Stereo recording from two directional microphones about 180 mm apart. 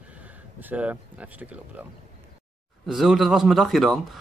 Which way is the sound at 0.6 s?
10° right (ahead or behind).